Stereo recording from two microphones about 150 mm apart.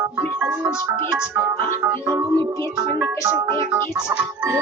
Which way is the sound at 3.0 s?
10° right (ahead or behind).